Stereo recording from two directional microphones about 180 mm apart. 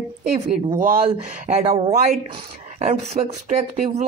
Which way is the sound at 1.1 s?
35° right (ahead or behind).